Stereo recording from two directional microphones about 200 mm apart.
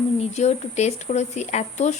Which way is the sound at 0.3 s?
35° left (ahead or behind).